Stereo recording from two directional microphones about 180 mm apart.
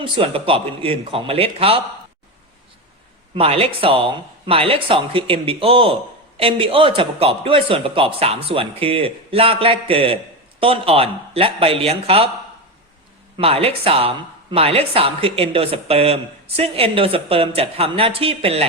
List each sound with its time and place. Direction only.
0.0 s speech: 30° right (ahead or behind)
3.3 s speech: 35° right (ahead or behind)
13.3 s speech: 30° right (ahead or behind)